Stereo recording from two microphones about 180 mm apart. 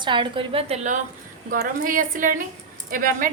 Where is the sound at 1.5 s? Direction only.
50° right (ahead or behind).